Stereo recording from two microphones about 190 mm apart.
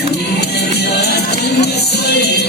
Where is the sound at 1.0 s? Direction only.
60° left (ahead or behind).